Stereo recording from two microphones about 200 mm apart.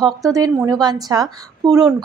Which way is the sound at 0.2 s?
15° right (ahead or behind).